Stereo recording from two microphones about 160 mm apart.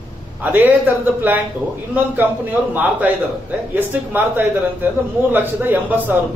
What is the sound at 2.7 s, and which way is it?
A man's voice, 10° right (ahead or behind).